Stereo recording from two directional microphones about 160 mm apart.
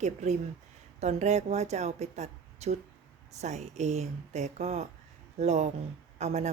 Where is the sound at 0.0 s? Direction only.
45° right (ahead or behind).